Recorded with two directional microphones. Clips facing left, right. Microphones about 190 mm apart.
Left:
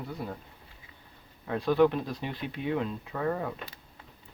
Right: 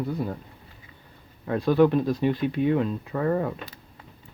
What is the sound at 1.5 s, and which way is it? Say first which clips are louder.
Speech: right 4 dB; 45° right (ahead or behind).